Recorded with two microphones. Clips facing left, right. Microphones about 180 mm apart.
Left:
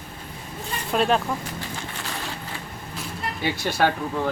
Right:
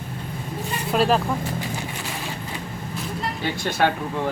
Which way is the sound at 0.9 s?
Centre (ahead or behind).